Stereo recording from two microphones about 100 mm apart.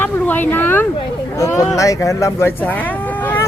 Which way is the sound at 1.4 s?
35° left (ahead or behind).